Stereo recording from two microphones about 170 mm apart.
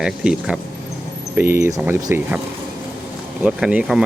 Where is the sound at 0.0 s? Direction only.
5° right (ahead or behind).